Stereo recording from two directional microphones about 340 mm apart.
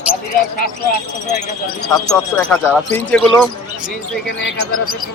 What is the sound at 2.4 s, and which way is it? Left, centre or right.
Speech, centre.